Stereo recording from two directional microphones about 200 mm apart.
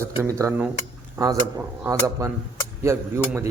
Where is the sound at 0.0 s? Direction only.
15° right (ahead or behind).